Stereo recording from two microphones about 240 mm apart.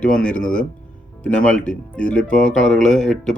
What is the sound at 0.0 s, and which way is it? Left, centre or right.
Speech, centre.